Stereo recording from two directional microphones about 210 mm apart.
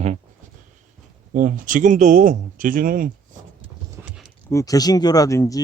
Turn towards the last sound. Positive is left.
turn(degrees=15)  # may be behind; listen again after turning